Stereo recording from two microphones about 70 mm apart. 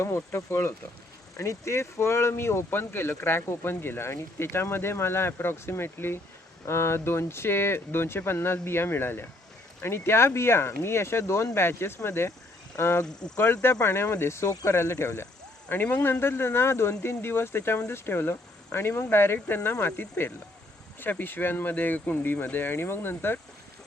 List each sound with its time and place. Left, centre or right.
0.0 s speech: left